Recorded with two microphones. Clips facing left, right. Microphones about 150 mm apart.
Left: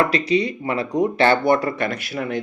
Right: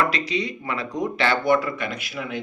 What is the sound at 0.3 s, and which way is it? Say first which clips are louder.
Speech: left 6 dB; 30° left (ahead or behind).